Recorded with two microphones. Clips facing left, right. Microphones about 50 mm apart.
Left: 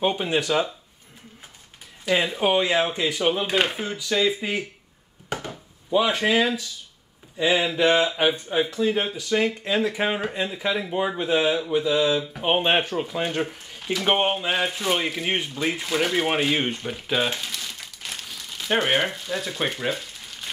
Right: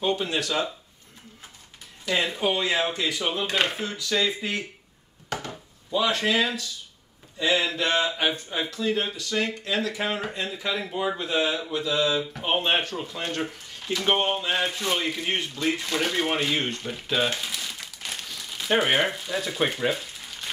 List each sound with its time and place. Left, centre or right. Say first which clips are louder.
0.0 s speech: left 3 dB; centre
2.0 s speech: left 3 dB; centre
5.3 s chopping: left 1 dB; centre
6.0 s speech: right 1 dB; centre
17.4 s crumpling: even; centre